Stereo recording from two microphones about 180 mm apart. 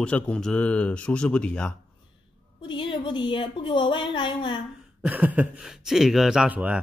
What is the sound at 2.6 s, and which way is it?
Speech, 30° left (ahead or behind).